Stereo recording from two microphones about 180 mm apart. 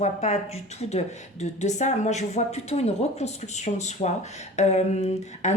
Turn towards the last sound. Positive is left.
turn(degrees=40)  # may be behind; listen again after turning